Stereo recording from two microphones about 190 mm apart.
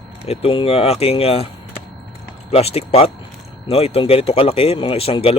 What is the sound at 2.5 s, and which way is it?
Speech, 30° left (ahead or behind).